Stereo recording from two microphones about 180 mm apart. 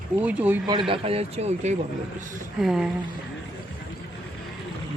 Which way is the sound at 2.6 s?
Centre (ahead or behind).